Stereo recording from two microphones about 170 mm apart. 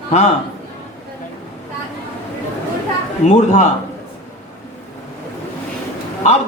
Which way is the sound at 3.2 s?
40° left (ahead or behind).